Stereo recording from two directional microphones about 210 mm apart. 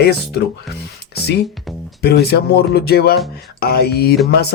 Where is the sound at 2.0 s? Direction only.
50° left (ahead or behind).